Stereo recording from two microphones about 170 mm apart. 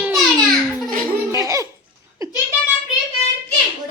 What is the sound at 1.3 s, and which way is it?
Laughter, 20° right (ahead or behind).